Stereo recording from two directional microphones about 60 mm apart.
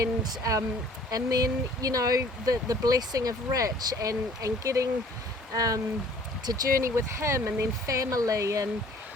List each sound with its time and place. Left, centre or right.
0.0 s speech: right
1.1 s speech: right
5.5 s speech: right